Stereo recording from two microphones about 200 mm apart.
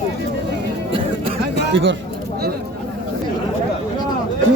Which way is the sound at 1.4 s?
65° right (ahead or behind).